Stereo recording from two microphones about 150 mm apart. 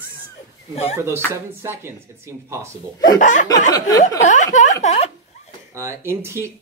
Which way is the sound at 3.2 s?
60° left (ahead or behind).